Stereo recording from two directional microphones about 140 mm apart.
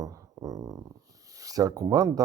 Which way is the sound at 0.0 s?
25° right (ahead or behind).